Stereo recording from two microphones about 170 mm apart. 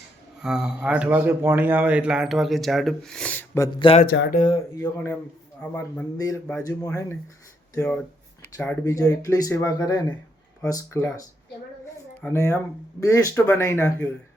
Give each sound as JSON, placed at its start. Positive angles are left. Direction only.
{"t": 0.4, "sound": "a man's voice", "side_deg": -5}
{"t": 3.8, "sound": "speech", "side_deg": 30}
{"t": 4.0, "sound": "speech", "side_deg": 65}
{"t": 5.7, "sound": "speech", "side_deg": 15}
{"t": 7.8, "sound": "a sound", "side_deg": 5}
{"t": 8.5, "sound": "speech", "side_deg": 15}
{"t": 12.2, "sound": "speech", "side_deg": 15}